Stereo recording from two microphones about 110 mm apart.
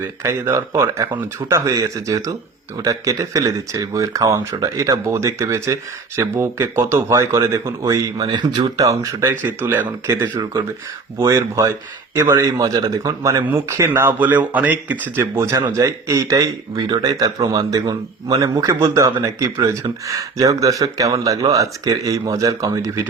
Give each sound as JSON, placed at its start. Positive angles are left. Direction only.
{"t": 0.0, "sound": "speech", "side_deg": -25}
{"t": 8.3, "sound": "speech", "side_deg": -45}
{"t": 8.7, "sound": "speech", "side_deg": -30}
{"t": 15.2, "sound": "speech", "side_deg": -30}
{"t": 16.7, "sound": "speech", "side_deg": -40}